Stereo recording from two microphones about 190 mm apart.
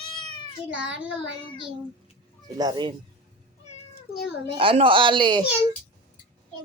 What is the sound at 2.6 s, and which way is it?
Speech, 20° right (ahead or behind).